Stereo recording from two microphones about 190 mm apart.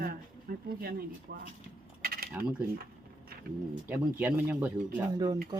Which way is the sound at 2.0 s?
55° right (ahead or behind).